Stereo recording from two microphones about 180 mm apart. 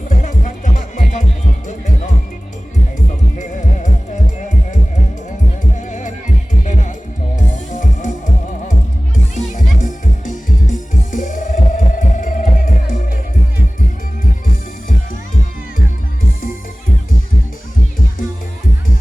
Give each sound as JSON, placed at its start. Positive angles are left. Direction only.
{"t": 0.1, "sound": "music", "side_deg": 45}
{"t": 3.3, "sound": "music", "side_deg": 45}
{"t": 9.1, "sound": "music", "side_deg": 45}
{"t": 14.4, "sound": "music", "side_deg": 50}